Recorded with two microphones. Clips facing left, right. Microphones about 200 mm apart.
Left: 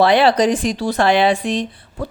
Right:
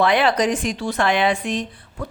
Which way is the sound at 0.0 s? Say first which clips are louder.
Left 4 dB; 35° left (ahead or behind).